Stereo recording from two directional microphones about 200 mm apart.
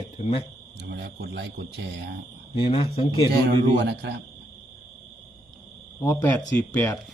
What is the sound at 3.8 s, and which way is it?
Speech, 60° right (ahead or behind).